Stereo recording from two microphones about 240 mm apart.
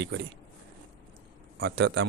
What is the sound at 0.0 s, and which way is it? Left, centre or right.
Speech, right.